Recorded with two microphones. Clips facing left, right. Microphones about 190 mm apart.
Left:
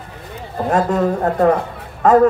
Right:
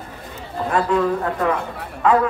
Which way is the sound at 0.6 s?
45° left (ahead or behind).